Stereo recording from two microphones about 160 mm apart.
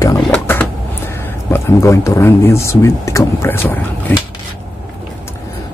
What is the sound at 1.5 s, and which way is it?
Speech, 15° left (ahead or behind).